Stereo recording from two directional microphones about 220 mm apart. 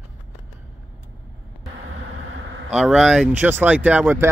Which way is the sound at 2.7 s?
5° right (ahead or behind).